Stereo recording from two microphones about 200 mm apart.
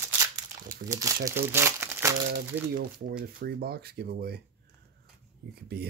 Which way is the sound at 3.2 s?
50° right (ahead or behind).